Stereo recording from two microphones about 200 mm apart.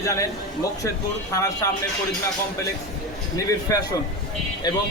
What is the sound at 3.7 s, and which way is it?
Speech, 15° left (ahead or behind).